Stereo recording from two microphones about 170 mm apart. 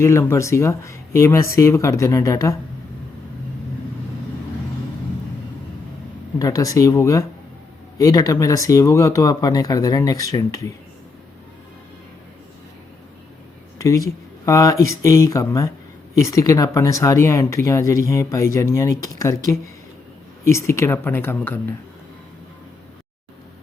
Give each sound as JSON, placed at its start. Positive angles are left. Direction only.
{"t": 0.0, "sound": "speech", "side_deg": 15}
{"t": 6.4, "sound": "speech", "side_deg": 20}
{"t": 13.7, "sound": "speech", "side_deg": 20}